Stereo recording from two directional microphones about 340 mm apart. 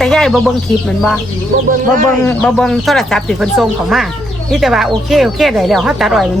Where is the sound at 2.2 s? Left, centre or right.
Centre.